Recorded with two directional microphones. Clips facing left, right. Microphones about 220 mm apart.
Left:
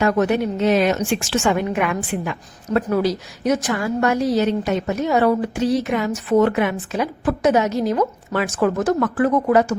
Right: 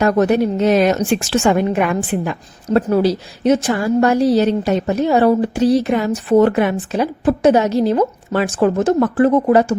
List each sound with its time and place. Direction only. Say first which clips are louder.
0.0 s a woman's voice: right 4 dB; 40° right (ahead or behind)